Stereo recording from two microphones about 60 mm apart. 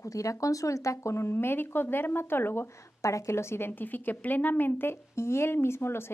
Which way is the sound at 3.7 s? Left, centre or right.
Left.